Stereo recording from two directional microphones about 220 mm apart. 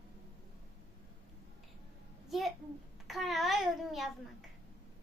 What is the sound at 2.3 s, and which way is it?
A child's voice, centre (ahead or behind).